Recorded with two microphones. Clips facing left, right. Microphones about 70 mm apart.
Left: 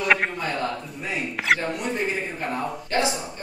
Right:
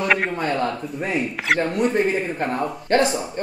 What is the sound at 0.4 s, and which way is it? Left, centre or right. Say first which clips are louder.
Speech: right 5 dB; right.